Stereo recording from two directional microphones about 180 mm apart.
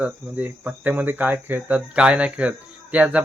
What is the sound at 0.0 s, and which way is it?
Speech, 10° right (ahead or behind).